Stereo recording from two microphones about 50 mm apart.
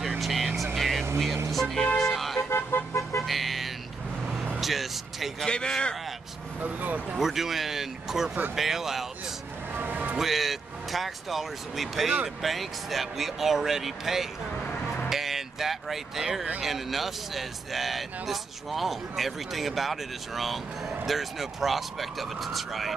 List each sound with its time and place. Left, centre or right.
0.2 s vehicle: centre
1.5 s speech: centre
2.0 s music: centre
2.5 s vehicle: left
3.0 s music: left
3.3 s a sound: centre
4.6 s vehicle: centre
5.4 s speech: centre
6.6 s speech: right
7.2 s speech: centre
9.8 s music: right
10.1 s speech: centre
15.0 s vehicle: centre
16.6 s speech: centre